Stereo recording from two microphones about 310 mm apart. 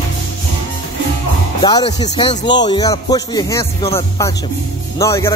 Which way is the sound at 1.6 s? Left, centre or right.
Centre.